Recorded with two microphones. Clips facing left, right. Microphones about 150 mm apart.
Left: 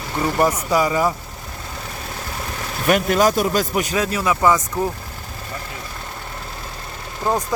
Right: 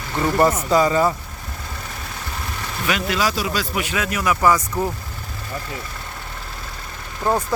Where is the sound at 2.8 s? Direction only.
45° left (ahead or behind); by 4.6 s 25° left (ahead or behind).